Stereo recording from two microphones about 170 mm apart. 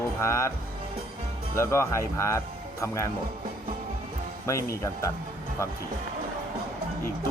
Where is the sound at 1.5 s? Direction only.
15° left (ahead or behind).